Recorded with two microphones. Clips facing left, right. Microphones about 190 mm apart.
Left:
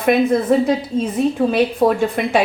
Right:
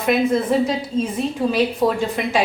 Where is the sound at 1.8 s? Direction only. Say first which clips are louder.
Left 4 dB; 55° left (ahead or behind).